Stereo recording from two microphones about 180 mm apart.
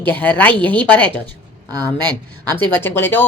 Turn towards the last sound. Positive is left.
turn(degrees=10)  # may be behind; listen again after turning